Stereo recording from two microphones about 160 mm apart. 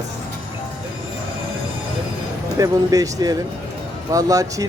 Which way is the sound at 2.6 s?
20° right (ahead or behind).